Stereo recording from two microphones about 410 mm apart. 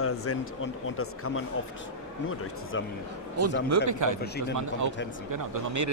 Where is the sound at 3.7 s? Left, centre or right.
Right.